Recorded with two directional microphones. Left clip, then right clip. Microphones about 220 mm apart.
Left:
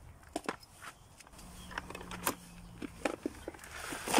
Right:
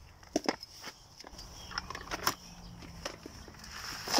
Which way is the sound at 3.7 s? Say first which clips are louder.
Right 1 dB; 30° left (ahead or behind).